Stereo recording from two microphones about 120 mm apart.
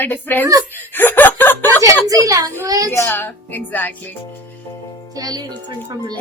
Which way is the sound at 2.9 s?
20° left (ahead or behind).